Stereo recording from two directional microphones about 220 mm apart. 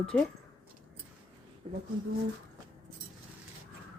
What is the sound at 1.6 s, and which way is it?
Speech, 25° right (ahead or behind).